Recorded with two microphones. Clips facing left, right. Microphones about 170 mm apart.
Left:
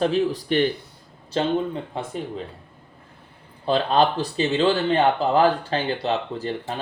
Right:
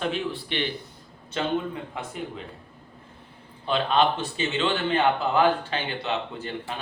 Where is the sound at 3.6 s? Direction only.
35° left (ahead or behind).